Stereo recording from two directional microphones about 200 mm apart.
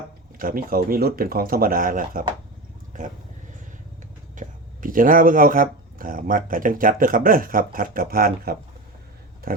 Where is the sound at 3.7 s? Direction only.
40° right (ahead or behind).